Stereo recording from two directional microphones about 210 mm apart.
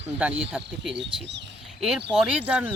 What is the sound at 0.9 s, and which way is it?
Speech, 55° right (ahead or behind).